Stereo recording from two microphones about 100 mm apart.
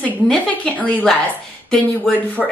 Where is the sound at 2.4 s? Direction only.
Centre (ahead or behind).